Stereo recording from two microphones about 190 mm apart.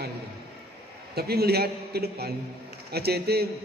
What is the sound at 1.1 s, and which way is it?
A man's voice, 55° right (ahead or behind).